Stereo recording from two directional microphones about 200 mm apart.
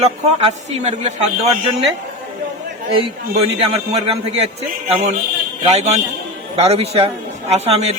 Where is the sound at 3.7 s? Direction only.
30° right (ahead or behind).